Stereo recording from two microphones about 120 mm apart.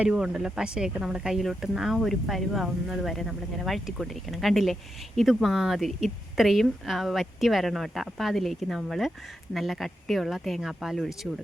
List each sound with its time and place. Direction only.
0.0 s speech: 10° right (ahead or behind)